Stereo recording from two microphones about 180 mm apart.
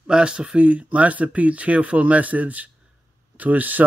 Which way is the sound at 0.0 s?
5° right (ahead or behind).